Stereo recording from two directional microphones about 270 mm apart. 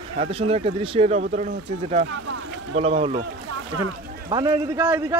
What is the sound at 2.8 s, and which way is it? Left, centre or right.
Speech, right.